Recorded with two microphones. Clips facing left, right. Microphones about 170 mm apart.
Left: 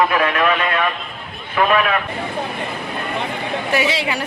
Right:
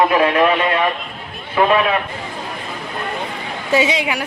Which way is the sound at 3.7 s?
20° right (ahead or behind).